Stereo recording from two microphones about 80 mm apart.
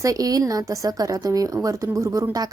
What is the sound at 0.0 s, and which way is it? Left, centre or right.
A woman's voice, right.